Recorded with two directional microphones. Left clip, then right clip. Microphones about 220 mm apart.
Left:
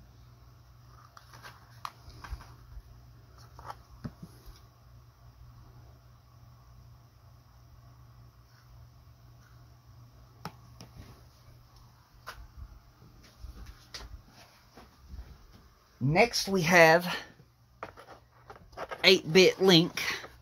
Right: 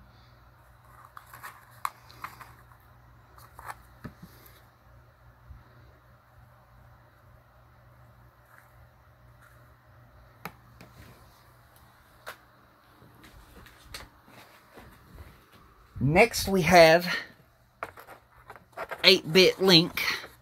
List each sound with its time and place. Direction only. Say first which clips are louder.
10.4 s finger snapping: right 2 dB; 30° left (ahead or behind)
16.1 s speech: right 3 dB; 20° right (ahead or behind); by 17.3 s 5° right (ahead or behind)
17.7 s writing: right 4 dB; centre (ahead or behind)